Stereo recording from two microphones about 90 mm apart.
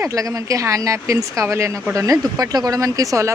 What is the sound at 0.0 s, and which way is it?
A woman's voice, 35° right (ahead or behind).